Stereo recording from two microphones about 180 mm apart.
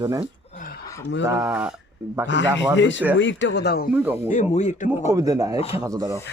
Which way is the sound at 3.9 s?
10° right (ahead or behind).